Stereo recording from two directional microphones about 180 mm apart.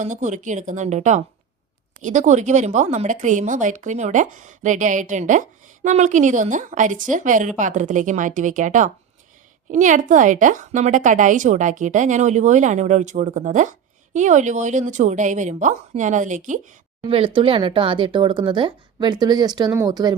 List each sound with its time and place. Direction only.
0.0 s speech: 40° right (ahead or behind)
17.0 s speech: 30° right (ahead or behind)